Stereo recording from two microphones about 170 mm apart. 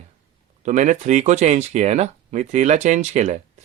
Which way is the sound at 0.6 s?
45° right (ahead or behind).